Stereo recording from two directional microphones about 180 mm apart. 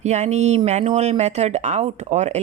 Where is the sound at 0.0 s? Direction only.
40° right (ahead or behind).